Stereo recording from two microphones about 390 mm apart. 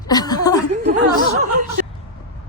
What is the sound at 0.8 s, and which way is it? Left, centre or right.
Speech, right.